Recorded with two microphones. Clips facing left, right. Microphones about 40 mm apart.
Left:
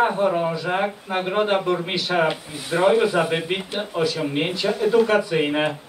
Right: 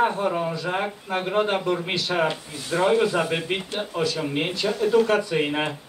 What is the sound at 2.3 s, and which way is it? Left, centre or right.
Speech, left.